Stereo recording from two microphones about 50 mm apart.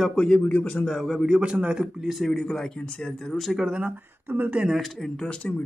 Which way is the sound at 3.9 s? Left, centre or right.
Right.